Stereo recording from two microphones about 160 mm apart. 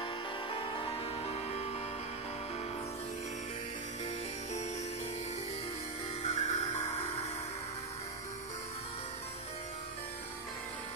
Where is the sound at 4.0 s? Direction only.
45° left (ahead or behind).